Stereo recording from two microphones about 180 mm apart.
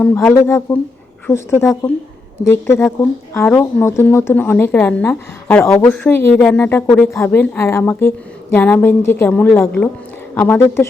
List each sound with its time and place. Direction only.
0.0 s a woman's voice: 10° left (ahead or behind)